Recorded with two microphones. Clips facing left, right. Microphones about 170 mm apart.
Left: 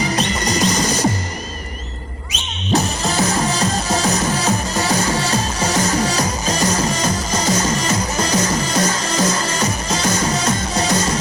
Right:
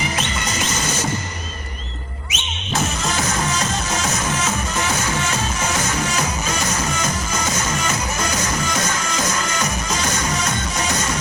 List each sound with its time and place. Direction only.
0.2 s music: 35° left (ahead or behind)
2.3 s music: 35° left (ahead or behind)